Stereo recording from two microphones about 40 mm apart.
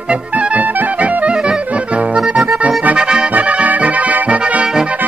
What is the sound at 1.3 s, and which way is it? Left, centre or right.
Accordion, right.